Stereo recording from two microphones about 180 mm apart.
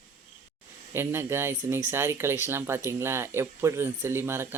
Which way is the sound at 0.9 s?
15° right (ahead or behind).